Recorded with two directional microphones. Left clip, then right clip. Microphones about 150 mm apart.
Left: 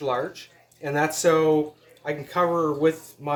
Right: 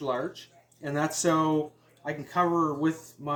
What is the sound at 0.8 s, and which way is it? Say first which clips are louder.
Speech: left 5 dB; 30° left (ahead or behind).